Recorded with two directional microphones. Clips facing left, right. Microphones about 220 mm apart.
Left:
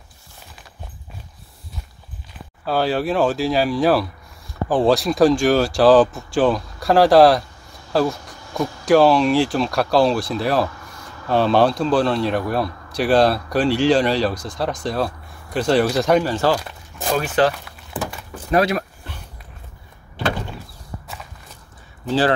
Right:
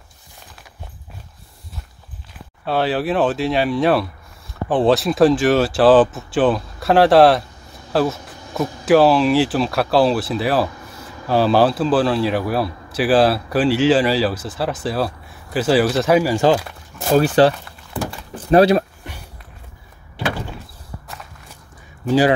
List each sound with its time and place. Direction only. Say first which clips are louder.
2.6 s speech: even; centre (ahead or behind)
17.2 s speech: right 4 dB; 30° right (ahead or behind)
22.0 s speech: right 3 dB; 10° right (ahead or behind)